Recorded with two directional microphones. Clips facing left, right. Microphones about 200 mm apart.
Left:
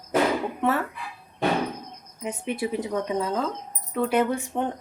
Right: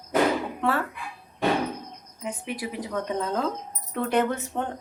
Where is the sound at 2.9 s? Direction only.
10° left (ahead or behind).